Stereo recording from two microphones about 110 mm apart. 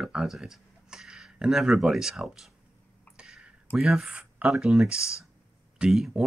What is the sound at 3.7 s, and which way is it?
Speech, 5° right (ahead or behind).